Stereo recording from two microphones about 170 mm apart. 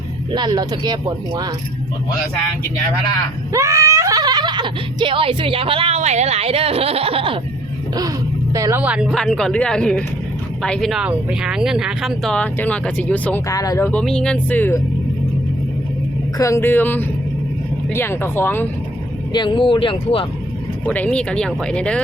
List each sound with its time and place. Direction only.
0.3 s speech: 25° right (ahead or behind)
3.5 s speech: 20° right (ahead or behind)
8.5 s speech: 20° right (ahead or behind)
8.8 s speech: 5° right (ahead or behind); by 13.4 s 10° left (ahead or behind)
13.5 s speech: 20° left (ahead or behind)
16.4 s speech: 15° left (ahead or behind)
19.3 s speech: 25° left (ahead or behind)
20.8 s speech: 10° left (ahead or behind)